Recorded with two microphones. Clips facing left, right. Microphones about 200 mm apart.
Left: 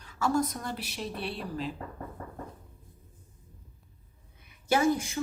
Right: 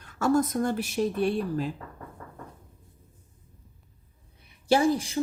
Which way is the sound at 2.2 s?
30° left (ahead or behind).